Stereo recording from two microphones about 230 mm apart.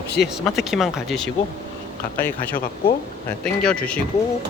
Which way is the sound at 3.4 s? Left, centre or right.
Centre.